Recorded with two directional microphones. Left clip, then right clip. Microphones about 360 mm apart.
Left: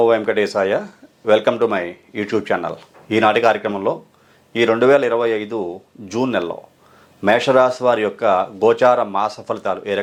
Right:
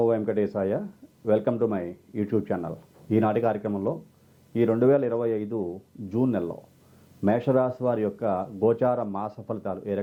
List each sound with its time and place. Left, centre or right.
0.0 s speech: centre
5.5 s speech: left
6.1 s speech: centre